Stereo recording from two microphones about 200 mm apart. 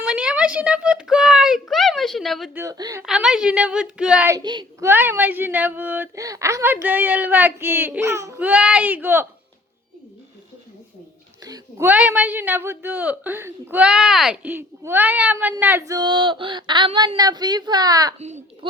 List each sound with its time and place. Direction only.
0.0 s speech: 5° right (ahead or behind)
2.6 s a woman's voice: 20° right (ahead or behind)
3.0 s a woman's voice: 5° right (ahead or behind); by 4.9 s 20° right (ahead or behind)
4.9 s a woman's voice: 10° right (ahead or behind)
11.4 s a woman's voice: 15° right (ahead or behind)
18.2 s a child's voice: 35° right (ahead or behind)